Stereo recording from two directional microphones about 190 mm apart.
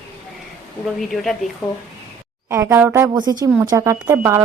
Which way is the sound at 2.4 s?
15° right (ahead or behind).